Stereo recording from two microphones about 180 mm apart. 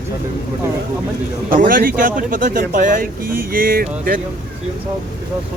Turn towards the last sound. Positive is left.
turn(degrees=-55)  # may be behind; listen again after turning